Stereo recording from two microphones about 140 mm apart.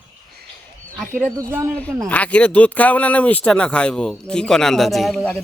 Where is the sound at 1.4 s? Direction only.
15° right (ahead or behind).